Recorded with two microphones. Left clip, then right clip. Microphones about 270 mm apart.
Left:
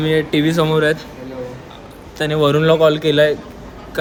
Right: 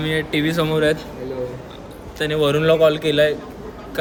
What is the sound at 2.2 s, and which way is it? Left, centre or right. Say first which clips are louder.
A man's voice: left 3 dB; centre.